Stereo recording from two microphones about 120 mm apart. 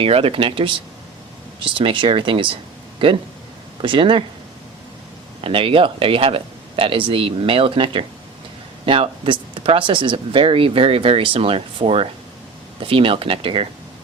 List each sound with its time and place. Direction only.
0.0 s speech: 50° right (ahead or behind)
5.4 s speech: 50° right (ahead or behind)